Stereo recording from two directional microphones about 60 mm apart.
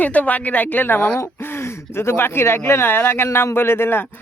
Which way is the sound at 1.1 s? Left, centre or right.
Left.